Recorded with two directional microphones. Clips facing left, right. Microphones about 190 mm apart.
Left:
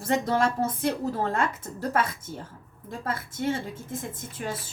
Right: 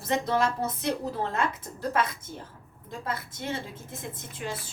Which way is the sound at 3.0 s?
50° left (ahead or behind).